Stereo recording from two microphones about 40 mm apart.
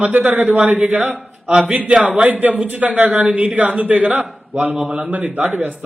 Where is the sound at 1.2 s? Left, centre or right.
Right.